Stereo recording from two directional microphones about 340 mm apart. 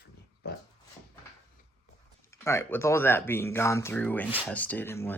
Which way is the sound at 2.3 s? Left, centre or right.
Centre.